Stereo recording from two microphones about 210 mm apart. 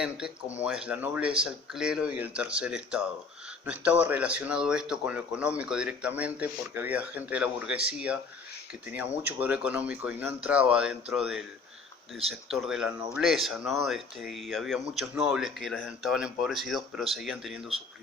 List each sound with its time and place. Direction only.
0.5 s speech: 5° right (ahead or behind)
9.2 s speech: 5° right (ahead or behind)
12.5 s speech: centre (ahead or behind)